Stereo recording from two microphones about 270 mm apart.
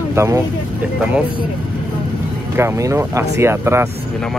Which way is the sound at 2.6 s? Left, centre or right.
Centre.